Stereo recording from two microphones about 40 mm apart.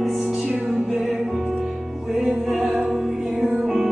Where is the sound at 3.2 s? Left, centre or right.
Right.